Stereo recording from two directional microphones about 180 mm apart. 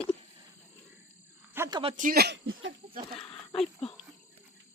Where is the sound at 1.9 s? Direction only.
55° right (ahead or behind); by 2.7 s 80° right.